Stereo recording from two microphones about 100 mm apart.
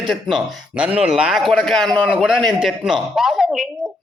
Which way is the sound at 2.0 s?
10° right (ahead or behind).